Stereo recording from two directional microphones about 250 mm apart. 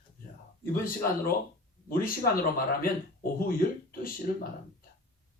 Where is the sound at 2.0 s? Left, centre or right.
Left.